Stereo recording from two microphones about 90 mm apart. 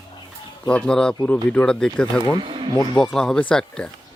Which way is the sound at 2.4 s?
65° right (ahead or behind).